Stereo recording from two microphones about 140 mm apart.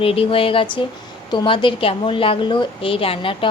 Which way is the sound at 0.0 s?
40° left (ahead or behind).